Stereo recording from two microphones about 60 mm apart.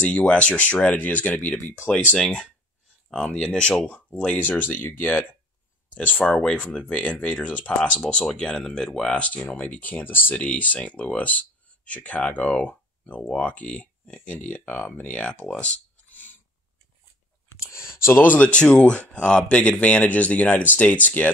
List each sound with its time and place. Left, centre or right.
0.0 s speech: centre
1.6 s speech: left
2.1 s speech: centre
8.0 s speech: centre
9.1 s speech: left
10.3 s speech: left
15.6 s a sound: left
17.6 s a sound: left
18.2 s speech: left